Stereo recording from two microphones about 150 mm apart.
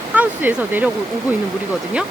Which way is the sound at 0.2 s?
10° right (ahead or behind).